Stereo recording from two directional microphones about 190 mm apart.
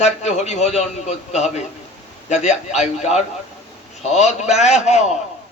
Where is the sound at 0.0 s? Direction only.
35° left (ahead or behind).